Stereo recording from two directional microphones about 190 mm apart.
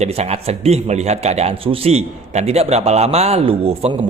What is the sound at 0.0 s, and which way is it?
A man's voice, 35° right (ahead or behind).